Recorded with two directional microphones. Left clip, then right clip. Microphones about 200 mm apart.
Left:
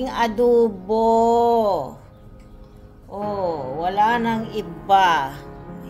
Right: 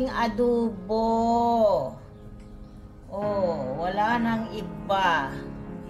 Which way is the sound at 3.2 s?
50° left (ahead or behind).